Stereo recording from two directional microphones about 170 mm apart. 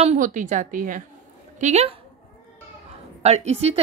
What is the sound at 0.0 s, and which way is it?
A woman's voice, 45° right (ahead or behind).